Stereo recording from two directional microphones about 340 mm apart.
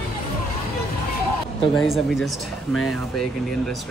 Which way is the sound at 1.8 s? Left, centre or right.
Centre.